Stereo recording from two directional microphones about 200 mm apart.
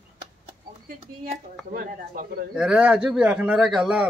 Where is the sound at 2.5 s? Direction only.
5° right (ahead or behind).